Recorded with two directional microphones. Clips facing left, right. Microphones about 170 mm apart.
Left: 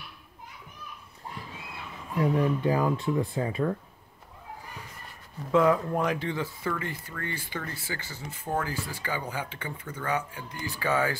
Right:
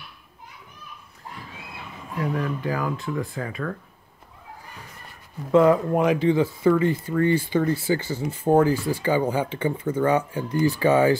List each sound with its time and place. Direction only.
2.1 s speech: 25° left (ahead or behind)
5.5 s speech: 5° right (ahead or behind)
5.9 s speech: 15° right (ahead or behind)